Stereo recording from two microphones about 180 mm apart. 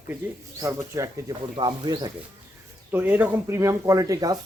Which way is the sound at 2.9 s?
10° right (ahead or behind).